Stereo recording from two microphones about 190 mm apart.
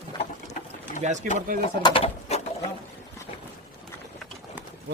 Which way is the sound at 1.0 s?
40° right (ahead or behind).